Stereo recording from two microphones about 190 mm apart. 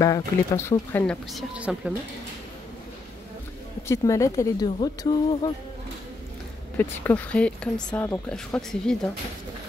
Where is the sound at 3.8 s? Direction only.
15° left (ahead or behind).